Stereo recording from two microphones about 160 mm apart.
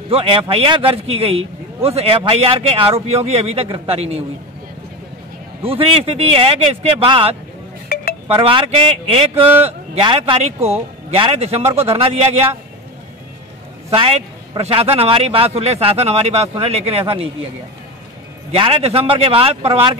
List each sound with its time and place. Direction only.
0.1 s a man's voice: 40° right (ahead or behind)
5.6 s a man's voice: 35° right (ahead or behind)
7.9 s a sound: 70° left (ahead or behind)
8.3 s a man's voice: 35° right (ahead or behind)
13.8 s a man's voice: 35° right (ahead or behind)
18.5 s a man's voice: 35° right (ahead or behind)